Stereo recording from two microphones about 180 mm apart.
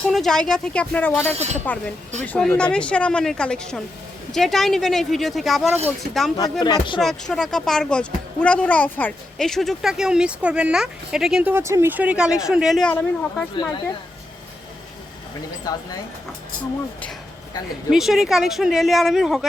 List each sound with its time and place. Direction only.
0.1 s a woman's voice: centre (ahead or behind)
1.4 s speech: 40° right (ahead or behind)
2.2 s a woman's voice: 10° left (ahead or behind)
6.3 s speech: 20° left (ahead or behind)
7.0 s a woman's voice: 5° left (ahead or behind)
15.7 s speech: 20° left (ahead or behind)
17.9 s a woman's voice: centre (ahead or behind)